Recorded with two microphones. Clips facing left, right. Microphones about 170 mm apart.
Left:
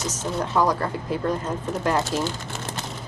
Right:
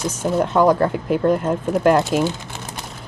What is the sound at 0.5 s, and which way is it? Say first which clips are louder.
Speech: right 6 dB; 55° right (ahead or behind).